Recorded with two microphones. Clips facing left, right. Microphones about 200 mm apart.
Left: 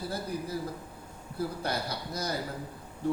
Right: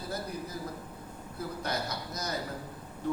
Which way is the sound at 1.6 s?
30° left (ahead or behind).